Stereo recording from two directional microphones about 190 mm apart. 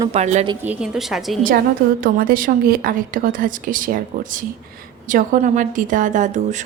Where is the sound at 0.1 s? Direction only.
35° right (ahead or behind).